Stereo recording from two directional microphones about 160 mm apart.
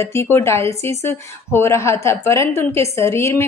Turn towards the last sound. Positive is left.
turn(degrees=15)  # may be behind; listen again after turning